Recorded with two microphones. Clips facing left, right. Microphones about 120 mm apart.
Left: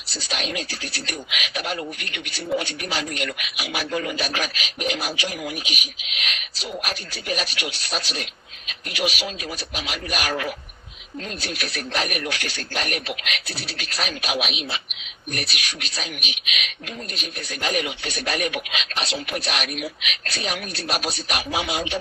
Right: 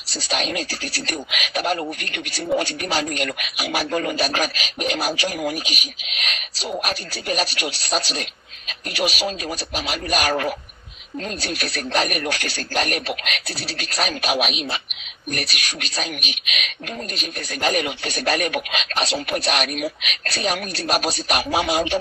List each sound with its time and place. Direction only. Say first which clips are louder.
0.1 s speech: right 4 dB; 40° right (ahead or behind)